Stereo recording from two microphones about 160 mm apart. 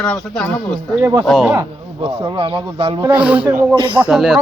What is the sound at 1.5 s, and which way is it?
Speech, 20° right (ahead or behind).